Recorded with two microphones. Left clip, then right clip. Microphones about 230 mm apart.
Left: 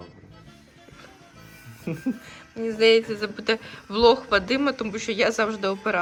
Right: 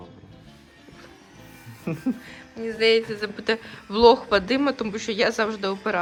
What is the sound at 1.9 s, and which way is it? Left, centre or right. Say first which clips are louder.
Speech: right 1 dB; centre.